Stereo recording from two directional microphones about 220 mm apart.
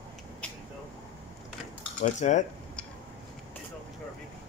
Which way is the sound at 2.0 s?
35° left (ahead or behind).